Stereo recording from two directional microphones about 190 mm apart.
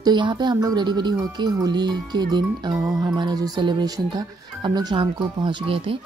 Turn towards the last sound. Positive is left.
turn(degrees=-30)  # may be behind; listen again after turning